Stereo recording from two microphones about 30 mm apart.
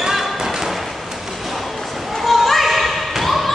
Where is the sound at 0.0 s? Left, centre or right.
Centre.